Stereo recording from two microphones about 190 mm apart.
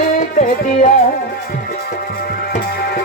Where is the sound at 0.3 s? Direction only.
45° left (ahead or behind).